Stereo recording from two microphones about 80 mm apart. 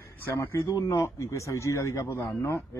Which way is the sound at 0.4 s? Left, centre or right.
Left.